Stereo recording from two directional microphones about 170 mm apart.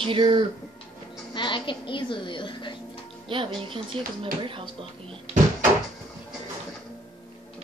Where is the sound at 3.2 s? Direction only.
30° right (ahead or behind).